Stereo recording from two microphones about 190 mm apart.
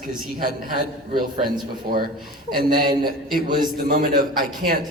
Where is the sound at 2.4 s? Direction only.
50° right (ahead or behind).